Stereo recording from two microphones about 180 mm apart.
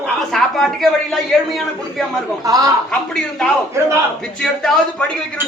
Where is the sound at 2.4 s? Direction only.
20° right (ahead or behind).